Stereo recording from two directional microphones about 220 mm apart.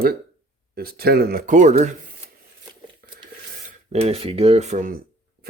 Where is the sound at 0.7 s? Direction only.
45° right (ahead or behind).